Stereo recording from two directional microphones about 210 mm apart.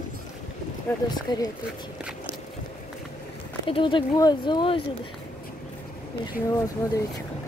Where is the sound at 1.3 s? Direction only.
20° left (ahead or behind).